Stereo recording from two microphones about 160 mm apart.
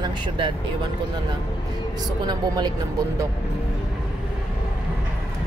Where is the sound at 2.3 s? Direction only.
25° right (ahead or behind).